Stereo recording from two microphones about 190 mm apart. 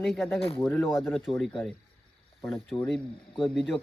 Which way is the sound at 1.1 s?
Centre (ahead or behind).